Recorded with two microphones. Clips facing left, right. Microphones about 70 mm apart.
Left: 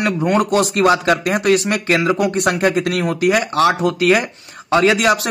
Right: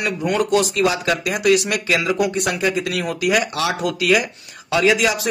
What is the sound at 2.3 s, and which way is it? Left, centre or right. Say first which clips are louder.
Speech: left 4 dB; left.